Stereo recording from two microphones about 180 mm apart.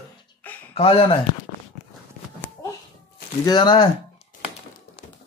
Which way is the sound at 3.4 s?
25° left (ahead or behind).